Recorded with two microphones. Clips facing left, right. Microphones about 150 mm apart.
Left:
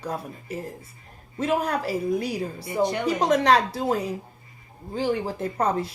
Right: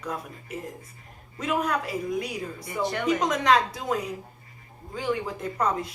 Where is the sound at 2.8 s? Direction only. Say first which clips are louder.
Left 4 dB; 20° left (ahead or behind).